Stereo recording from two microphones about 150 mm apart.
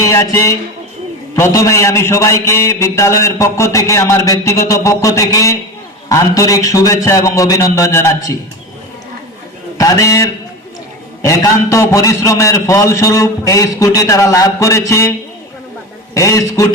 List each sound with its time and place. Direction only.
0.0 s a man's voice: 20° left (ahead or behind)
9.7 s a man's voice: 20° left (ahead or behind)
16.1 s a man's voice: 20° left (ahead or behind)